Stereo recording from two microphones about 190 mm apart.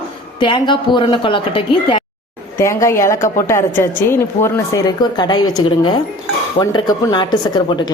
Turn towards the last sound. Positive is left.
turn(degrees=25)  # may be behind; listen again after turning